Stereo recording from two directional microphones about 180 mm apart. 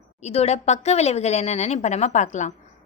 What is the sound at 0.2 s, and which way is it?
A woman's voice, 35° left (ahead or behind).